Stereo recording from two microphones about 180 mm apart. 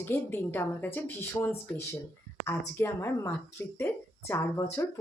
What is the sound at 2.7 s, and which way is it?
Speech, 15° left (ahead or behind).